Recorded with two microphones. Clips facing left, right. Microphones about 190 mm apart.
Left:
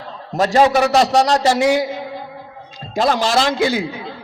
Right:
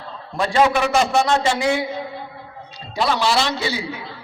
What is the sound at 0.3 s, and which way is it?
A man's voice, 40° left (ahead or behind).